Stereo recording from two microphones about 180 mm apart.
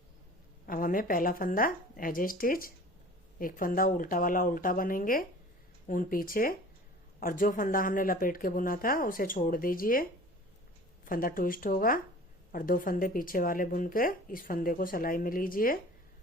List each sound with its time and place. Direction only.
0.7 s speech: 50° left (ahead or behind)